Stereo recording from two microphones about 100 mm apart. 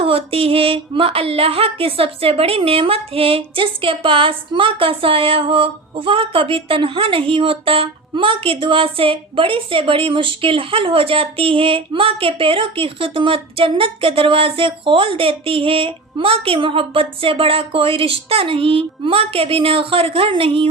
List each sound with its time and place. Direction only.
0.0 s speech: 75° right (ahead or behind)